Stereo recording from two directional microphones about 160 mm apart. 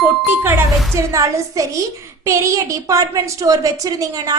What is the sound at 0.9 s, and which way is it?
A woman's voice, 20° right (ahead or behind).